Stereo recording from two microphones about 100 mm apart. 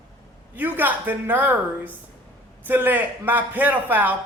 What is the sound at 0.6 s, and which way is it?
A man's voice, 20° right (ahead or behind).